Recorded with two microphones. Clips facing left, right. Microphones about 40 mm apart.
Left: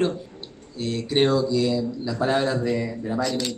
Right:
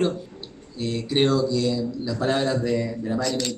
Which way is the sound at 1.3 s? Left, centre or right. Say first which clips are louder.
Left 1 dB; centre.